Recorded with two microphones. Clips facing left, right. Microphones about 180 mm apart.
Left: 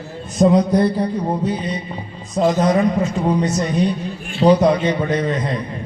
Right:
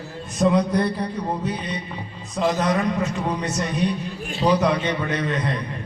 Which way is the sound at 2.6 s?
30° left (ahead or behind).